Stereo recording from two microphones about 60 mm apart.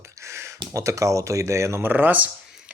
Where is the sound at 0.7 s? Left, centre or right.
Right.